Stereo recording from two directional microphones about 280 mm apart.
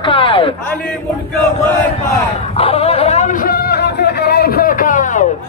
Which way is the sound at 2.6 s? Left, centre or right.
Left.